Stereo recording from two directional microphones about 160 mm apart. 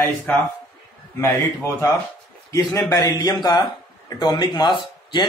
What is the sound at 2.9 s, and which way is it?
Speech, 25° left (ahead or behind).